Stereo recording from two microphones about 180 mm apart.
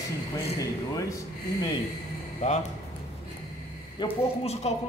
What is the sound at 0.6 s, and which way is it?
Speech, 20° left (ahead or behind).